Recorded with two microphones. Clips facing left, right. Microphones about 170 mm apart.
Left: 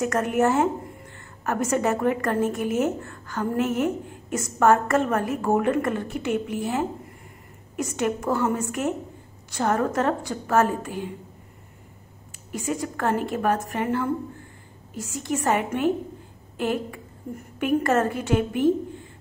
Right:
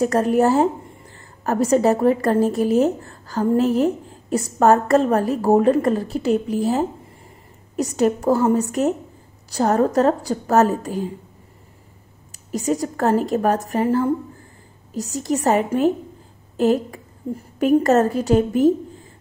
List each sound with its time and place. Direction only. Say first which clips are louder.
0.0 s a woman's voice: right 5 dB; 35° right (ahead or behind)
12.5 s a woman's voice: right 6 dB; 40° right (ahead or behind)
17.3 s a woman's voice: right 7 dB; 30° right (ahead or behind)